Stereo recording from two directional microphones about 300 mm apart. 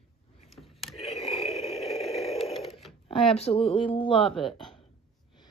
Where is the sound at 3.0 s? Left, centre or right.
Centre.